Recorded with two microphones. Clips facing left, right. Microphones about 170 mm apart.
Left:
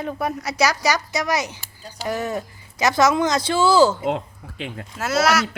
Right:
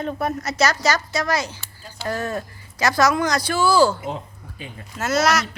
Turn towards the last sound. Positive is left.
turn(degrees=5)  # may be behind; listen again after turning